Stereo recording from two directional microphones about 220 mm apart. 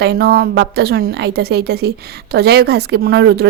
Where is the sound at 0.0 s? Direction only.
45° right (ahead or behind).